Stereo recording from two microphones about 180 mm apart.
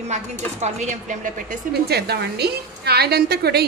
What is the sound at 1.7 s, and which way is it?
A woman's voice, 65° right (ahead or behind).